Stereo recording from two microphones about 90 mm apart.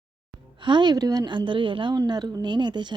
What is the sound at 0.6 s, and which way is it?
A woman's voice, 60° right (ahead or behind).